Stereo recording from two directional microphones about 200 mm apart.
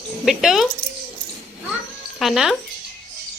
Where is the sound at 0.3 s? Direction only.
Centre (ahead or behind).